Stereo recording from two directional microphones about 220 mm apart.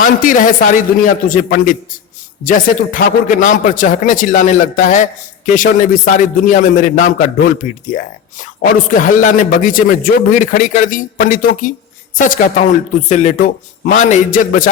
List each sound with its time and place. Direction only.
0.0 s a man's voice: 40° left (ahead or behind)